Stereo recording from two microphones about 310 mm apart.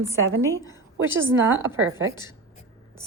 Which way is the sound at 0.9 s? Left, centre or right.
Right.